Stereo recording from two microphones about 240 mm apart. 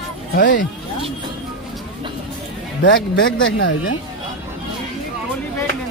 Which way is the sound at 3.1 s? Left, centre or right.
Left.